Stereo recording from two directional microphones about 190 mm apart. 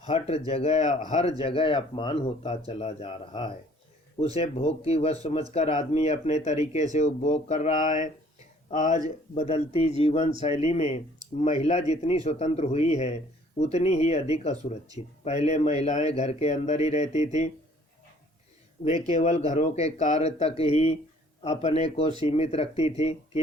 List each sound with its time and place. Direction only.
0.0 s speech: 30° left (ahead or behind)
18.8 s speech: 25° left (ahead or behind)
19.1 s speech: 40° left (ahead or behind)